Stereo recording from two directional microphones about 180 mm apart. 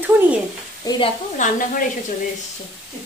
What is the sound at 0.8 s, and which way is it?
Speech, 25° left (ahead or behind).